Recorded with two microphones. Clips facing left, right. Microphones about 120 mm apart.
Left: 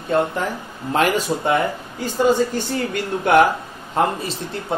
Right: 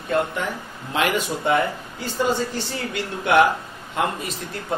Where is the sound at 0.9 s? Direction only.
40° left (ahead or behind).